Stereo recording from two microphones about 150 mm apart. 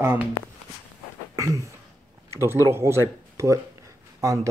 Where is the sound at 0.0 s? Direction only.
15° right (ahead or behind).